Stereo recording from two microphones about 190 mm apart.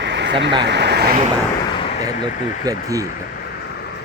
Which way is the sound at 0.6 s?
65° right (ahead or behind).